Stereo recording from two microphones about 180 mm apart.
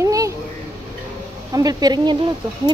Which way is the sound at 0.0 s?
20° right (ahead or behind).